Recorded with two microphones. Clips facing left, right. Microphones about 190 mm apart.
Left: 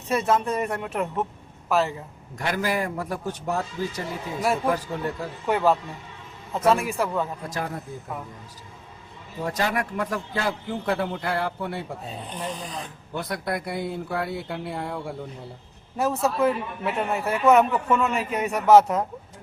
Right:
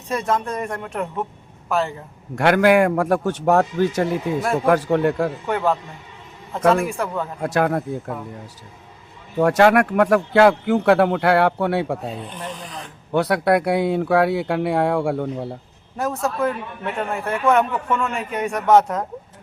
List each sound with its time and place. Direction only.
0.1 s a man's voice: 5° left (ahead or behind)
2.3 s a man's voice: 75° right (ahead or behind)
5.5 s a man's voice: 5° left (ahead or behind)
6.9 s a man's voice: centre (ahead or behind)
7.4 s a man's voice: 70° right (ahead or behind)
9.4 s a man's voice: 75° right (ahead or behind)
13.1 s a man's voice: 75° right (ahead or behind)
16.0 s a man's voice: centre (ahead or behind)